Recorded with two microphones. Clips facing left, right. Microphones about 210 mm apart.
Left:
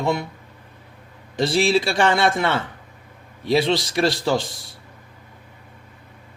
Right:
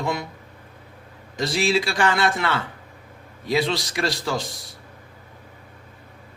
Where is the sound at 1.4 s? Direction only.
30° left (ahead or behind).